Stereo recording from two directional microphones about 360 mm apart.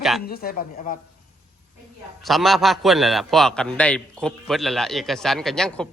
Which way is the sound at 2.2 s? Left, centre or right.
Centre.